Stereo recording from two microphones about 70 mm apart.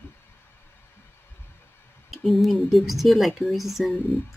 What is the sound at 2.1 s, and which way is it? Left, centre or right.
Speech, centre.